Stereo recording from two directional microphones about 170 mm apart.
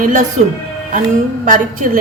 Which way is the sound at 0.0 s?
50° right (ahead or behind).